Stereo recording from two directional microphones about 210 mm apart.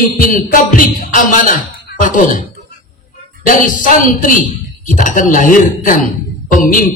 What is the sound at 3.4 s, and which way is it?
Speech, 40° left (ahead or behind).